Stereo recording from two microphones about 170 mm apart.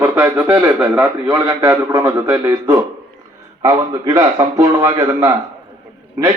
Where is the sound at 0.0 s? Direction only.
10° right (ahead or behind).